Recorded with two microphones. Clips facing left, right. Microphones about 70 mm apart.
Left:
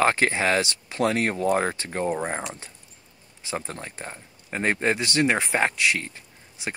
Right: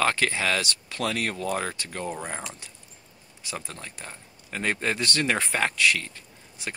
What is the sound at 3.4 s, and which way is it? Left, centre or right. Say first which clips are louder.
Speech: left 5 dB; left.